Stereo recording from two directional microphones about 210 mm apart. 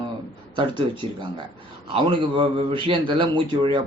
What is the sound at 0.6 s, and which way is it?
A man's voice, 25° right (ahead or behind).